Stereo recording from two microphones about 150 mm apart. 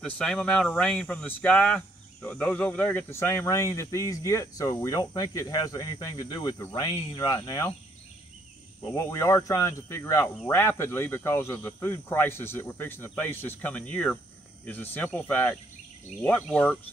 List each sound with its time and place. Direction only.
0.0 s speech: 5° left (ahead or behind); by 7.7 s 25° left (ahead or behind)
8.9 s speech: 20° left (ahead or behind)